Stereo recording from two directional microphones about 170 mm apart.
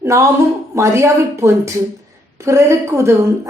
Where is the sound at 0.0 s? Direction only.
15° right (ahead or behind).